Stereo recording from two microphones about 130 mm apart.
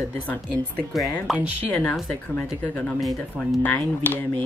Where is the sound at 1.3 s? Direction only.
Centre (ahead or behind).